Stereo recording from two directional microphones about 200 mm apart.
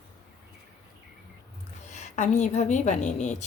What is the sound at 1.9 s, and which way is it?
Speech, 35° left (ahead or behind).